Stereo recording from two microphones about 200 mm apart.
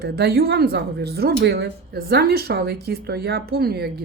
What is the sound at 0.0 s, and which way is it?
A woman's voice, 55° right (ahead or behind).